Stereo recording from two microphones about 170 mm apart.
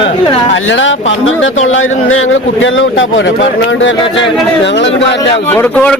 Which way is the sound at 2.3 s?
90° left.